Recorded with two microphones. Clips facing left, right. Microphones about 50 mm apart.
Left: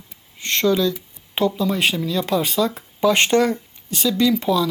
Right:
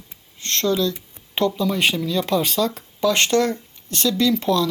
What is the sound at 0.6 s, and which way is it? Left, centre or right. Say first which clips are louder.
Speech: left 2 dB; centre.